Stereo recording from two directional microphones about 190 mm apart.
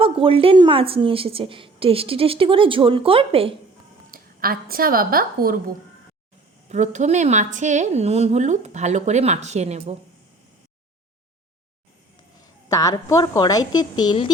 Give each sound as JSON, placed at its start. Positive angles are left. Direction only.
{"t": 0.0, "sound": "a woman's voice", "side_deg": -30}
{"t": 4.1, "sound": "a woman's voice", "side_deg": -50}
{"t": 6.7, "sound": "a woman's voice", "side_deg": -40}
{"t": 12.6, "sound": "a woman's voice", "side_deg": 20}